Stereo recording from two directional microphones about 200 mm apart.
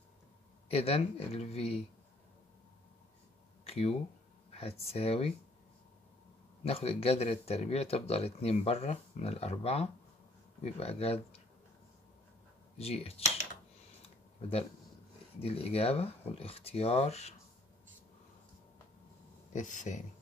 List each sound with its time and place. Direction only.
0.7 s speech: 30° left (ahead or behind)
3.6 s a sound: 30° left (ahead or behind)
4.5 s speech: 30° left (ahead or behind)
6.6 s speech: 30° left (ahead or behind)
12.7 s speech: 30° left (ahead or behind)
14.0 s a sound: 30° left (ahead or behind)
15.4 s speech: 30° left (ahead or behind)
19.5 s speech: 40° left (ahead or behind)